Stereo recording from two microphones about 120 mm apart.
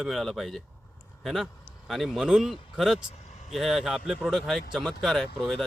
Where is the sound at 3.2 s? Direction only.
80° left.